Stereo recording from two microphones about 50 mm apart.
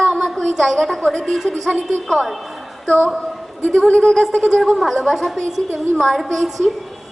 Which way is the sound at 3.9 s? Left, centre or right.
Centre.